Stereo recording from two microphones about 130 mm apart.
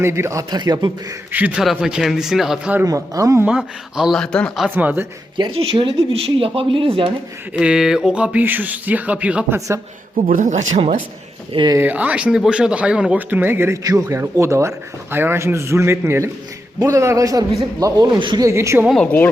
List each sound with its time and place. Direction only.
0.0 s a man's voice: 20° right (ahead or behind)
1.3 s speech: 10° right (ahead or behind)
2.8 s a man's voice: 25° right (ahead or behind)
3.4 s speech: 5° right (ahead or behind)
4.7 s speech: 15° right (ahead or behind)
5.4 s speech: 40° right (ahead or behind)
7.5 s speech: 5° right (ahead or behind)
9.6 s a man's voice: 25° right (ahead or behind)
10.2 s a man's voice: 80° right
11.5 s speech: 35° right (ahead or behind)
11.8 s a man's voice: 10° right (ahead or behind); by 18.4 s 35° right (ahead or behind)
18.4 s a man's voice: 20° right (ahead or behind)